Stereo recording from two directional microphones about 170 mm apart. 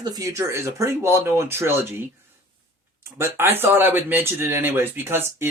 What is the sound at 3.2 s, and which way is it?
Speech, 15° right (ahead or behind).